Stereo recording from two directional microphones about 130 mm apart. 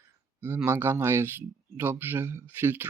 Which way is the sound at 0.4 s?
20° right (ahead or behind).